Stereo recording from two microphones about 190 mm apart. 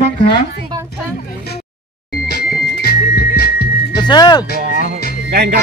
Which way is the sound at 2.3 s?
55° left (ahead or behind).